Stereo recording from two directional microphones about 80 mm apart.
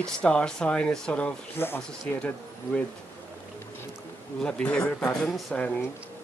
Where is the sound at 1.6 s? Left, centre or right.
Left.